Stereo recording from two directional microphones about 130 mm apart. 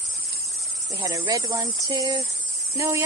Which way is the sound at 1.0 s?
30° right (ahead or behind).